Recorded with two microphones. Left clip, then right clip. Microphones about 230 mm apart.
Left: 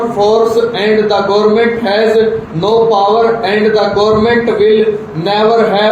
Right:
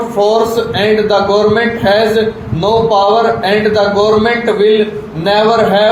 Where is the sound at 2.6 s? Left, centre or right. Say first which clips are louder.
Even; right.